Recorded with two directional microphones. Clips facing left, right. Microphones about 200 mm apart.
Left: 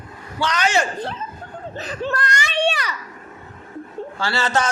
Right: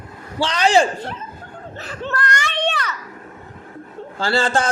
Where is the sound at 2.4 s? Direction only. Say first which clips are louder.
Left 1 dB; 10° left (ahead or behind).